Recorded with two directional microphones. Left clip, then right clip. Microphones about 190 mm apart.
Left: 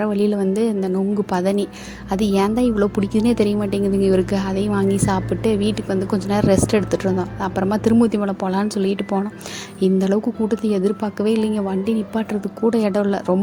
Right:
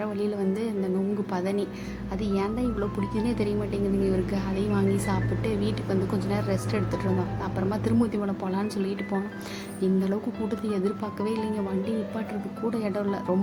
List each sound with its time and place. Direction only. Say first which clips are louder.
0.0 s speech: left 9 dB; 35° left (ahead or behind)